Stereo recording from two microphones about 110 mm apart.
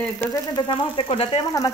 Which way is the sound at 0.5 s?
45° left (ahead or behind).